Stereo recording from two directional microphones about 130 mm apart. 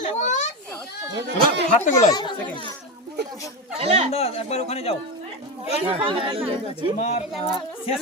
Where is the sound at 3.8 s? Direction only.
50° right (ahead or behind).